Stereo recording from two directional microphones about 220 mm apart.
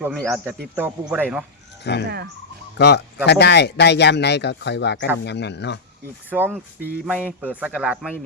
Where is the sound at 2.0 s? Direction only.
50° right (ahead or behind).